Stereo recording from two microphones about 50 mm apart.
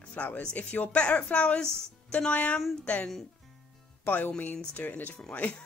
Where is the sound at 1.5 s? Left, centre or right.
Centre.